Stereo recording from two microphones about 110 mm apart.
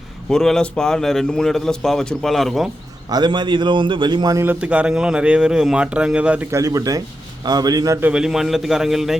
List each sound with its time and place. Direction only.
0.3 s a man's voice: 5° left (ahead or behind)
3.1 s a man's voice: 40° right (ahead or behind)
4.6 s speech: 10° right (ahead or behind)
6.5 s a man's voice: 30° right (ahead or behind)
8.0 s a man's voice: 5° right (ahead or behind)